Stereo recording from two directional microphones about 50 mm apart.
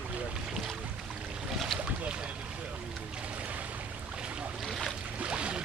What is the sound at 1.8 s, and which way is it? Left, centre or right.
Boat, right.